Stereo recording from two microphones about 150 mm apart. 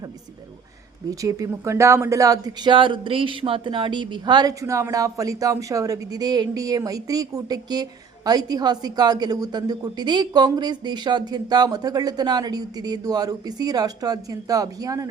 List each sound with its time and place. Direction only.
1.2 s speech: 20° right (ahead or behind)